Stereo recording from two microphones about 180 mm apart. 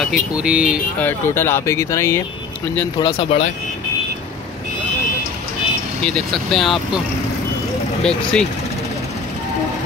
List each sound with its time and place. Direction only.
0.0 s speech: 5° right (ahead or behind)
0.9 s speech: 10° left (ahead or behind)
3.0 s speech: 30° left (ahead or behind)
6.0 s speech: 5° left (ahead or behind)
8.1 s speech: 5° left (ahead or behind)